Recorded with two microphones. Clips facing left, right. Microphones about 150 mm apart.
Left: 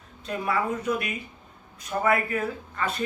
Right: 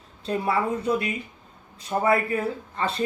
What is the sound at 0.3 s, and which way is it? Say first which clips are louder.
Speech: right 3 dB; 30° right (ahead or behind).